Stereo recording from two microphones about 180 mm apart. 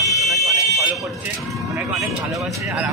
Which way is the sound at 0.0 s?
Centre (ahead or behind).